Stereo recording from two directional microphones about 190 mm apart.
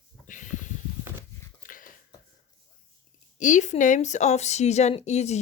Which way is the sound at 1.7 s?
45° left (ahead or behind).